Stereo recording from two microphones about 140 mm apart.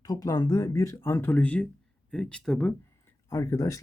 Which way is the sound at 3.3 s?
20° left (ahead or behind).